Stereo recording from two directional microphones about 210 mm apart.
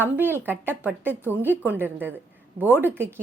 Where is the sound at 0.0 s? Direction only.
10° right (ahead or behind).